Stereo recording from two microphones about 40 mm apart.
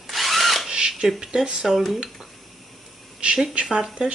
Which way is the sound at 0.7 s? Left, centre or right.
Centre.